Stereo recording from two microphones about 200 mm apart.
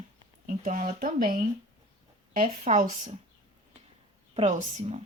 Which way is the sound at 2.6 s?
40° right (ahead or behind).